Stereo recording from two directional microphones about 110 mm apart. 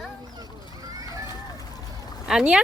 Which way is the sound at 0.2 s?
35° right (ahead or behind).